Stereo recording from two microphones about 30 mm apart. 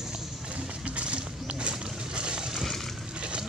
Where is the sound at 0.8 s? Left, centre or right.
Right.